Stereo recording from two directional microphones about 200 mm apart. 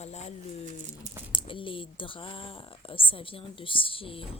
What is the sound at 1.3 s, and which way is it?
Speech, 25° left (ahead or behind).